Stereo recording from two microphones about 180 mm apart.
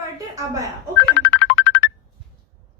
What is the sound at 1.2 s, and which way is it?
Music, 75° left (ahead or behind).